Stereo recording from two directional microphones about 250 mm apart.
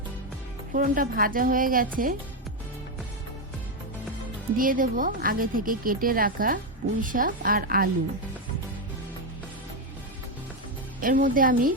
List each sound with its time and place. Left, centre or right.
0.7 s speech: right
4.5 s speech: right
11.0 s speech: right